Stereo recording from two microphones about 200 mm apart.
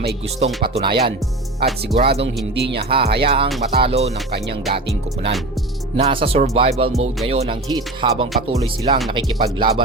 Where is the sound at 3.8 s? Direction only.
30° right (ahead or behind).